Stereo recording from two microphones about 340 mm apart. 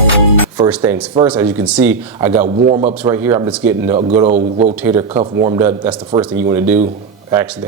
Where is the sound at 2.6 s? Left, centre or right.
Centre.